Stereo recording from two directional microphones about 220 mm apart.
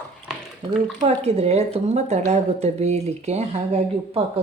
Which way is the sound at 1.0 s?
30° right (ahead or behind).